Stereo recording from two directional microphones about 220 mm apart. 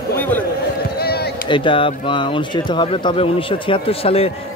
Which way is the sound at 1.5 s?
20° left (ahead or behind).